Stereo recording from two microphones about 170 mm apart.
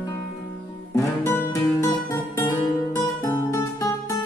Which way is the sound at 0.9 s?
15° left (ahead or behind).